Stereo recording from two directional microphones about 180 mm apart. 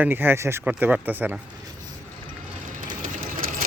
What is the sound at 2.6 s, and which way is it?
Sewing machine, 50° right (ahead or behind).